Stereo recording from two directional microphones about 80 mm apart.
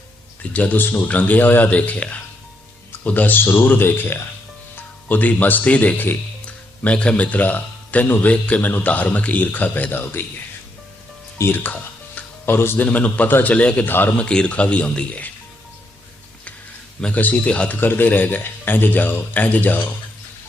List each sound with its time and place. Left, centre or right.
0.5 s speech: centre
11.3 s speech: left
14.2 s a man's voice: centre
17.0 s a man's voice: centre